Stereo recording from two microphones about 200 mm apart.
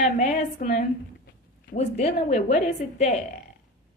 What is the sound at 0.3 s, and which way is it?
Speech, 35° left (ahead or behind).